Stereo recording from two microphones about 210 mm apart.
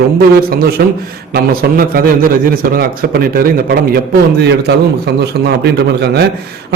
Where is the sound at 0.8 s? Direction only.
50° right (ahead or behind).